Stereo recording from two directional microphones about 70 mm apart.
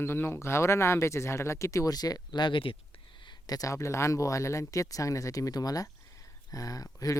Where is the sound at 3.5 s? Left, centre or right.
Left.